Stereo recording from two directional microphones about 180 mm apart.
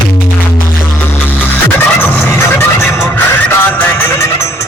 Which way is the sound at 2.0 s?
10° left (ahead or behind).